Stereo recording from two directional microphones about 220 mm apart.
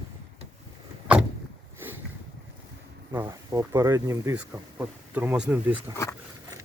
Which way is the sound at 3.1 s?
15° right (ahead or behind).